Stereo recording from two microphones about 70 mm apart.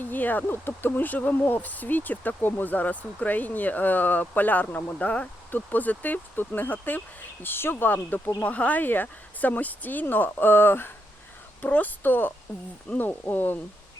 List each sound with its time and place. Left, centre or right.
0.0 s speech: left